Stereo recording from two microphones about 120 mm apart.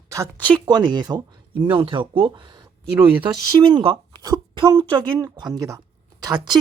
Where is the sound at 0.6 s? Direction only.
40° right (ahead or behind).